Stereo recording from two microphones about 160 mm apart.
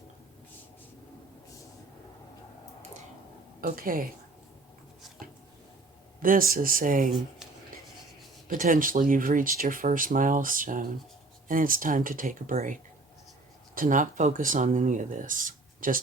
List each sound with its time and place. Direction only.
3.6 s speech: 65° right (ahead or behind)
6.2 s speech: 65° right (ahead or behind)
8.4 s speech: 60° right (ahead or behind)